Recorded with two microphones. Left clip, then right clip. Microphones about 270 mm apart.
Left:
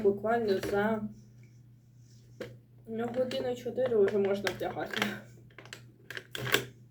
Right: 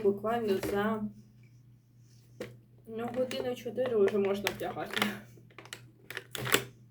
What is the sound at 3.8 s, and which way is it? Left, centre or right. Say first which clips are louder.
Speech: left 1 dB; centre.